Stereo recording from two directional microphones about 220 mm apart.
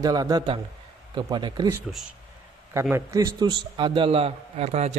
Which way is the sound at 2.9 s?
15° right (ahead or behind).